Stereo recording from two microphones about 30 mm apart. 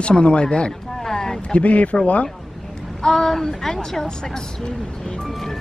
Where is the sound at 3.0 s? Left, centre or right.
Centre.